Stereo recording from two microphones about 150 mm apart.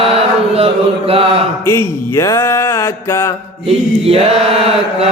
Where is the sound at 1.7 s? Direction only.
20° left (ahead or behind).